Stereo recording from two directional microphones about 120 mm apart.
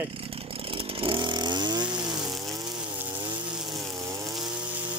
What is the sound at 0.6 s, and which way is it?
Chainsaw, 50° right (ahead or behind).